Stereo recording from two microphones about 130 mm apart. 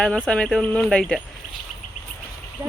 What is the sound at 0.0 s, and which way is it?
Music, 5° left (ahead or behind).